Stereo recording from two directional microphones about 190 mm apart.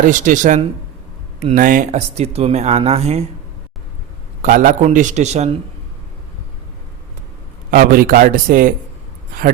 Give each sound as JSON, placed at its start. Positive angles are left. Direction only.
{"t": 0.0, "sound": "speech", "side_deg": -45}
{"t": 4.4, "sound": "speech", "side_deg": -45}
{"t": 7.7, "sound": "speech", "side_deg": -50}